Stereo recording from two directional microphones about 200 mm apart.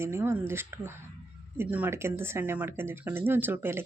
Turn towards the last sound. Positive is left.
turn(degrees=-10)  # may be behind; listen again after turning